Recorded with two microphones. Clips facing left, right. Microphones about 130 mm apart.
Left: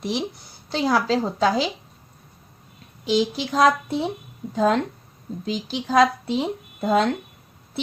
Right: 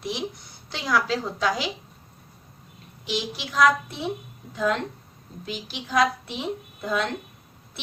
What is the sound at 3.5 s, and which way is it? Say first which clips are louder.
A woman's voice: left 2 dB; 35° left (ahead or behind).